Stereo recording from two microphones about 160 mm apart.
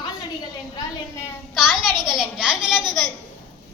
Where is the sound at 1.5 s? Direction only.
5° right (ahead or behind).